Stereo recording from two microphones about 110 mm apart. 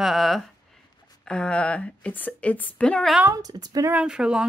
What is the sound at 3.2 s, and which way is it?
Speech, 35° right (ahead or behind).